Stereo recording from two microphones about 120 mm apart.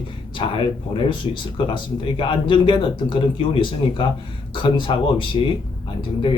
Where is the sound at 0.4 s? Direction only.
45° left (ahead or behind).